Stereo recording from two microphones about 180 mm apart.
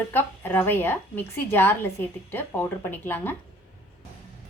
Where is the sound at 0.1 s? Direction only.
10° left (ahead or behind).